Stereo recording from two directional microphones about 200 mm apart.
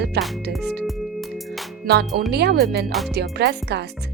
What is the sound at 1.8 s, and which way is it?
Speech, 55° right (ahead or behind).